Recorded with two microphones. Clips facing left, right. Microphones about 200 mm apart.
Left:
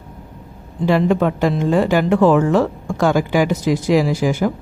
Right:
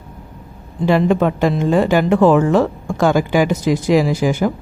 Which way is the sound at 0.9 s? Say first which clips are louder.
Right 1 dB; 20° right (ahead or behind).